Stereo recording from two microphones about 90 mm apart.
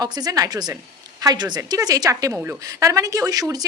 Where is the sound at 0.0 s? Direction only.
45° right (ahead or behind).